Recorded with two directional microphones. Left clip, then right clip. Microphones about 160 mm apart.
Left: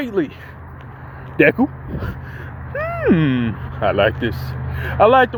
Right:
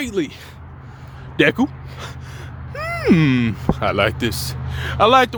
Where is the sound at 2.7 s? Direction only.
50° right (ahead or behind).